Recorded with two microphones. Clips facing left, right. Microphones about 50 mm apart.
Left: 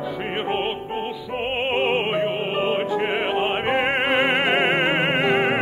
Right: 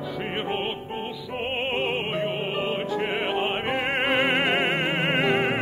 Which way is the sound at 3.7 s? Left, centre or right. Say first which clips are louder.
Left 4 dB; left.